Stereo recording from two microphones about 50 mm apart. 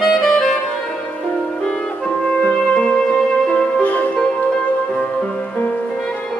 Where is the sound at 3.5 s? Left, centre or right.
Left.